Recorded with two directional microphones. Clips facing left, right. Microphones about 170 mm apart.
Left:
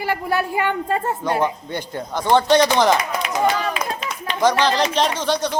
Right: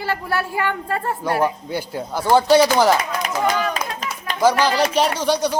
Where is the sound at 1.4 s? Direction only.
5° right (ahead or behind).